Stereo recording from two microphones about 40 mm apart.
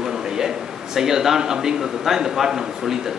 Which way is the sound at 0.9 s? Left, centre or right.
Centre.